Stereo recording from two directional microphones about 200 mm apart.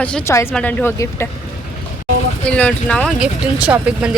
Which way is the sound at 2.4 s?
5° left (ahead or behind).